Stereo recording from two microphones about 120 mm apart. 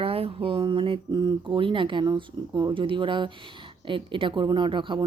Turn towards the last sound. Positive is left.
turn(degrees=-45)  # may be behind; listen again after turning